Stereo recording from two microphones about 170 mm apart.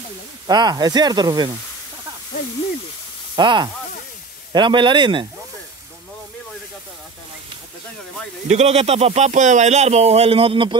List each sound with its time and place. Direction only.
0.5 s speech: 25° right (ahead or behind)
3.3 s speech: 25° right (ahead or behind)
8.5 s speech: 40° right (ahead or behind)